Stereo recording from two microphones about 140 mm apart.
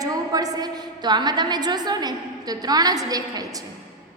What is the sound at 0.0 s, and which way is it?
A woman's voice, 25° right (ahead or behind).